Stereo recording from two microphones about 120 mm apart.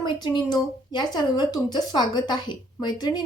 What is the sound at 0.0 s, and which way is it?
A woman's voice, 35° left (ahead or behind).